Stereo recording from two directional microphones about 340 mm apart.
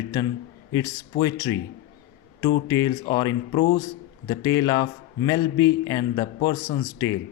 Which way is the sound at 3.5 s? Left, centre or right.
Left.